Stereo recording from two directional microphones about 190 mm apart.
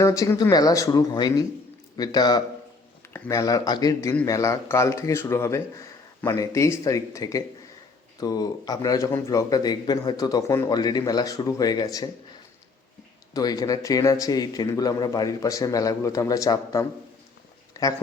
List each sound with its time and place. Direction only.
0.0 s a man's voice: 15° left (ahead or behind)
13.3 s a man's voice: 20° left (ahead or behind)